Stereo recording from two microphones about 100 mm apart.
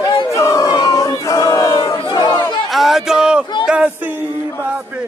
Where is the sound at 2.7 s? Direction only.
Centre (ahead or behind).